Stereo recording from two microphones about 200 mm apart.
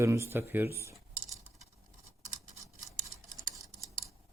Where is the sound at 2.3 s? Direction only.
40° right (ahead or behind).